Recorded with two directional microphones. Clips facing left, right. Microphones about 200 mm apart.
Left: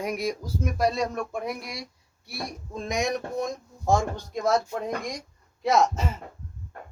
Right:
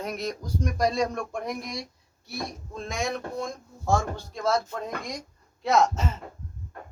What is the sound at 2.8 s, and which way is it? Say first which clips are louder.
Speech: left 3 dB; 20° left (ahead or behind).